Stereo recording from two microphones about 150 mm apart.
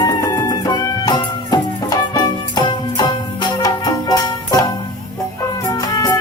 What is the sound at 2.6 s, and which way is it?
Music, 30° left (ahead or behind).